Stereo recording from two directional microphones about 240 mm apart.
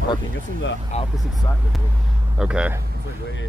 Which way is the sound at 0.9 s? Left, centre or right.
Left.